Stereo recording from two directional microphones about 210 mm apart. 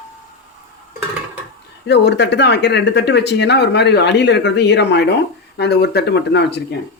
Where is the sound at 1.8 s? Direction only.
55° left (ahead or behind).